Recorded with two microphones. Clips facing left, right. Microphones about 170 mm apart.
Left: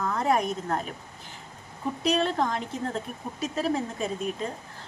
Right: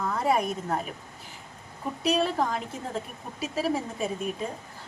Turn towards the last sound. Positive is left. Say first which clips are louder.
# even
turn(degrees=-5)  # may be behind; listen again after turning